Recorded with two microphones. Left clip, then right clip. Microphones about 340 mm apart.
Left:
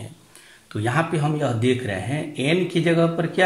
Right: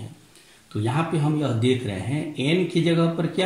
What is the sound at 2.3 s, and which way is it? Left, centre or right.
Speech, left.